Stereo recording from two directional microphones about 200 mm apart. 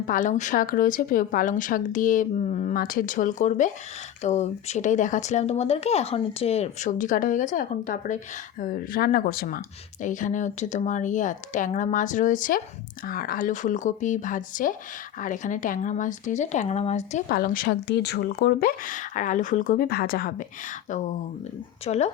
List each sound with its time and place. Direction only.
0.1 s speech: 40° left (ahead or behind)
21.8 s speech: 35° left (ahead or behind)